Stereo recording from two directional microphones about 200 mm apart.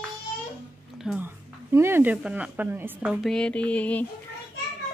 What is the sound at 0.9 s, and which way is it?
Speech, 5° right (ahead or behind).